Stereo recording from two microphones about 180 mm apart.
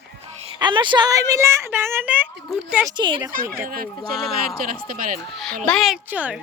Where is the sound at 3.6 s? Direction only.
55° right (ahead or behind).